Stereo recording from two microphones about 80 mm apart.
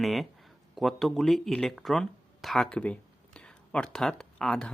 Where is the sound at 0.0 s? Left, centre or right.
Centre.